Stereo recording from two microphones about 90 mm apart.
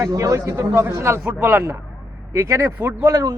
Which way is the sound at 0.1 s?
35° right (ahead or behind).